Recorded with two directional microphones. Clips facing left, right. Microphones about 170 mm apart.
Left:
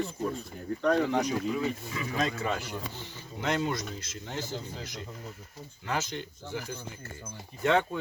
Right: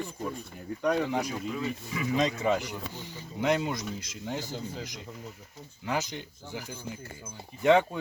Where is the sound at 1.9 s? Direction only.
20° right (ahead or behind).